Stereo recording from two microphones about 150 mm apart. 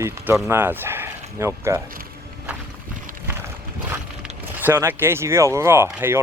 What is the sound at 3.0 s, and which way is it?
Clip-clop, 65° right (ahead or behind).